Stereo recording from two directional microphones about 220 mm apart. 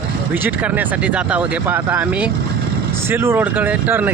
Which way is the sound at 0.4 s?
5° right (ahead or behind).